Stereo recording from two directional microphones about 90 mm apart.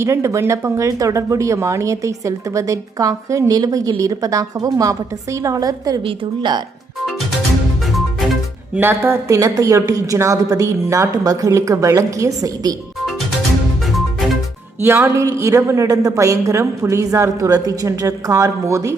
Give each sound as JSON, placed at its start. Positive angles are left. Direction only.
{"t": 0.0, "sound": "a woman's voice", "side_deg": -30}
{"t": 6.1, "sound": "a woman's voice", "side_deg": -60}
{"t": 8.8, "sound": "a woman's voice", "side_deg": -25}
{"t": 14.8, "sound": "music", "side_deg": -25}
{"t": 15.4, "sound": "a woman's voice", "side_deg": -30}